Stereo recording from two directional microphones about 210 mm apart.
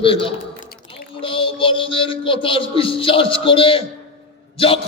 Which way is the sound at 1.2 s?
25° left (ahead or behind).